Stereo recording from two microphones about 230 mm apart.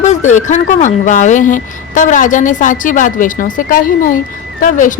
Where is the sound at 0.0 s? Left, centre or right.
Left.